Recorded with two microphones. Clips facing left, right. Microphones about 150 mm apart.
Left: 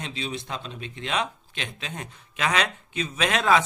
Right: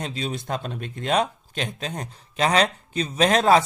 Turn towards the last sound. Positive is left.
turn(degrees=-40)  # may be behind; listen again after turning